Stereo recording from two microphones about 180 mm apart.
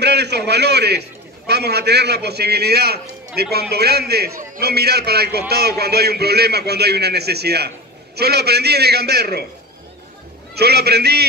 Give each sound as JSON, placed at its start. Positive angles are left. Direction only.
{"t": 0.0, "sound": "a man's voice", "side_deg": -65}
{"t": 10.5, "sound": "a man's voice", "side_deg": -65}